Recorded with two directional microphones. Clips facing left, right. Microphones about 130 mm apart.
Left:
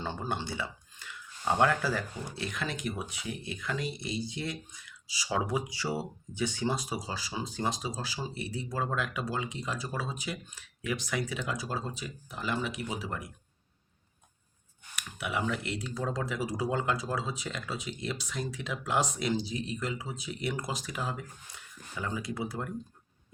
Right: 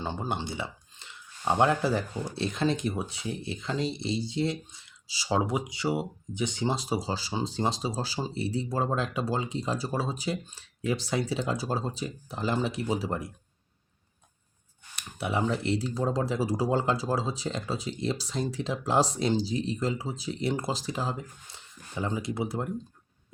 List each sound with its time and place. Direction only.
0.0 s speech: 20° right (ahead or behind)
14.9 s speech: 30° right (ahead or behind)